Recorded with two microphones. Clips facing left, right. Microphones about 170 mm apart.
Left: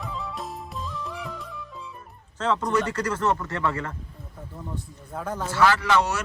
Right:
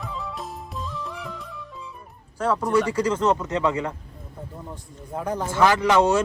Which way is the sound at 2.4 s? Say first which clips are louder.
Right 3 dB; 10° right (ahead or behind).